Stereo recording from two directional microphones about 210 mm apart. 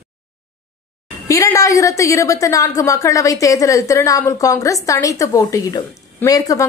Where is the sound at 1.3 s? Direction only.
15° left (ahead or behind).